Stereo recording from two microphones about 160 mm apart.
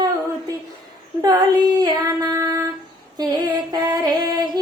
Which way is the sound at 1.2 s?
25° right (ahead or behind).